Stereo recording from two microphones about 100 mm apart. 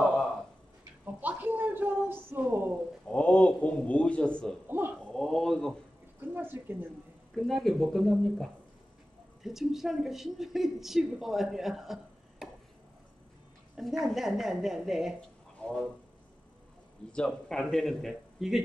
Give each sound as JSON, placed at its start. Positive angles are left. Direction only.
{"t": 1.0, "sound": "a sound", "side_deg": -15}
{"t": 3.1, "sound": "a man's voice", "side_deg": 15}
{"t": 4.6, "sound": "speech", "side_deg": -20}
{"t": 4.9, "sound": "a woman's voice", "side_deg": 5}
{"t": 6.3, "sound": "a woman's voice", "side_deg": -20}
{"t": 7.3, "sound": "a woman's voice", "side_deg": 0}
{"t": 13.7, "sound": "a woman's voice", "side_deg": -5}
{"t": 15.6, "sound": "speech", "side_deg": 15}
{"t": 17.3, "sound": "a woman's voice", "side_deg": 5}